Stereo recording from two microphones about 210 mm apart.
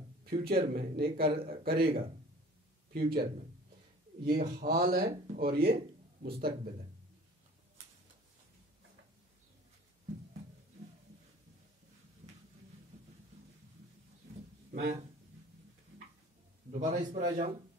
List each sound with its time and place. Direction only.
0.2 s a man's voice: 45° right (ahead or behind)
14.7 s speech: 45° right (ahead or behind)
16.8 s a man's voice: 35° right (ahead or behind)